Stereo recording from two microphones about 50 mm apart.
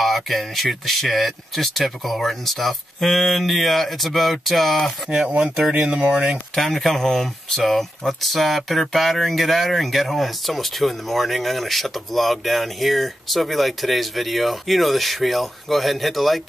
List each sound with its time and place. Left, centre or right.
0.0 s speech: centre
5.1 s speech: centre
6.5 s speech: centre